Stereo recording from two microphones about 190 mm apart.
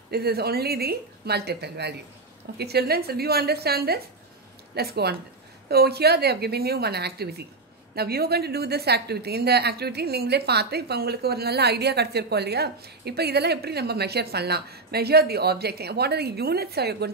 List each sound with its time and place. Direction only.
0.1 s a woman's voice: 55° right (ahead or behind)